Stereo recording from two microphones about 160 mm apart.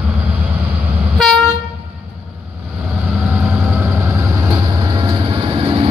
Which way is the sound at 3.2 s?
10° right (ahead or behind).